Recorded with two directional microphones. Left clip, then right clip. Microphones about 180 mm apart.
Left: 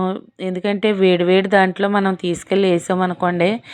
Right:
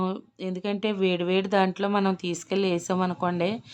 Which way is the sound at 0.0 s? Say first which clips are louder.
Left 8 dB; 20° left (ahead or behind).